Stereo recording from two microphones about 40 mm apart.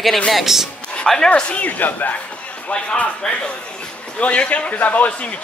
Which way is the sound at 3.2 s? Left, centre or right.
Centre.